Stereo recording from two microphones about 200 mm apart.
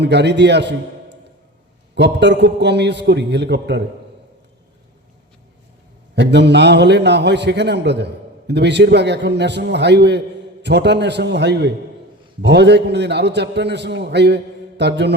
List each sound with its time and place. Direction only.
0.0 s a man's voice: 60° right (ahead or behind)
6.1 s a man's voice: 60° right (ahead or behind)